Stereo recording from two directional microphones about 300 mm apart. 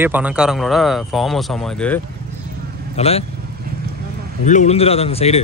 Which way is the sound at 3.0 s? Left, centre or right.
Centre.